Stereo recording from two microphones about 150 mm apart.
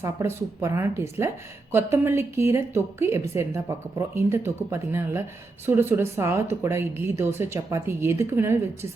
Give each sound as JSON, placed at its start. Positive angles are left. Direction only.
{"t": 0.0, "sound": "a woman's voice", "side_deg": -20}